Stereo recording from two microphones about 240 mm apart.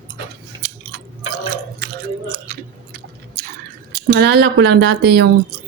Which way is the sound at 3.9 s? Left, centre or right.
Right.